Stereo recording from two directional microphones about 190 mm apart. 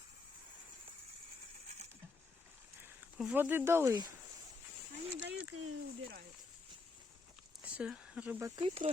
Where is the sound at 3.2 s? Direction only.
5° right (ahead or behind).